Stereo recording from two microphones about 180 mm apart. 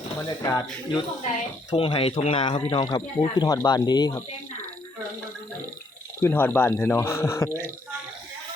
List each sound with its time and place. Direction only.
0.2 s speech: 15° left (ahead or behind)
1.7 s speech: 30° left (ahead or behind)
6.2 s speech: 10° left (ahead or behind)